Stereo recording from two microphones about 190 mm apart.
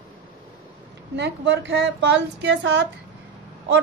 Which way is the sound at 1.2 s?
65° right (ahead or behind).